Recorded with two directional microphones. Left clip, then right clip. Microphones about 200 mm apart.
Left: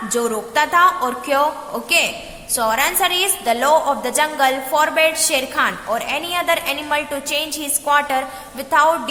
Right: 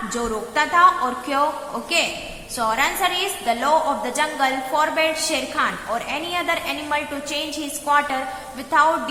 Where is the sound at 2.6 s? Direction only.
45° left (ahead or behind).